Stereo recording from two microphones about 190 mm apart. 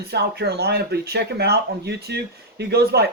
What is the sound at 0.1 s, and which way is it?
Speech, 60° right (ahead or behind).